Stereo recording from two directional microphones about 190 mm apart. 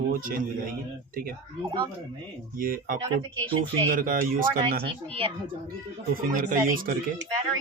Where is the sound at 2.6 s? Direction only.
50° right (ahead or behind).